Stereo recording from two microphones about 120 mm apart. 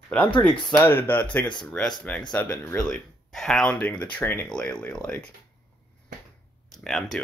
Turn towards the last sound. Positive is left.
turn(degrees=0)  # may be behind; listen again after turning